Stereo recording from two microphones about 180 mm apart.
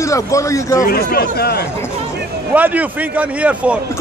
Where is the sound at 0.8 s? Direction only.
60° left (ahead or behind).